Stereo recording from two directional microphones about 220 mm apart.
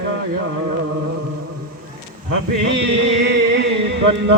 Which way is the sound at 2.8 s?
55° right (ahead or behind).